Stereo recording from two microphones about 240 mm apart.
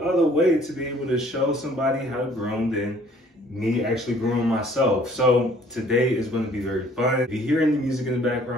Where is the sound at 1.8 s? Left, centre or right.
Centre.